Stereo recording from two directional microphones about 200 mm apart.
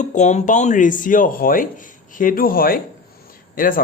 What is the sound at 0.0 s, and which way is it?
A man's voice, 35° left (ahead or behind).